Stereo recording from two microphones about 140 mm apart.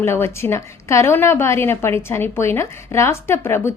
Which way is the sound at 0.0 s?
15° left (ahead or behind).